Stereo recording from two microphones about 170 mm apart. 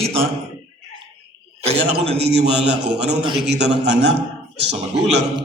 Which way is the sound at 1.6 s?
35° right (ahead or behind).